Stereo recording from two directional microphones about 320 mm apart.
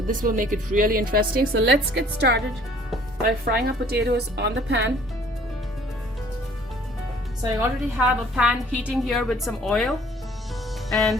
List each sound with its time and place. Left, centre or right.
0.1 s a woman's voice: right
7.4 s a woman's voice: centre
10.8 s music: centre